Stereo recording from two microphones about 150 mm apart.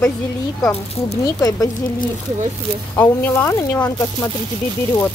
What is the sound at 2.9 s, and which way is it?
Speech, 15° left (ahead or behind).